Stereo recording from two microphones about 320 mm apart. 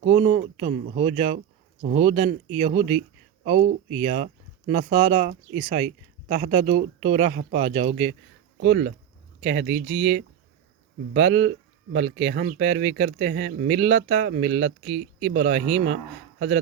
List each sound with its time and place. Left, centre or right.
0.0 s speech: right
8.6 s speech: right
11.1 s speech: right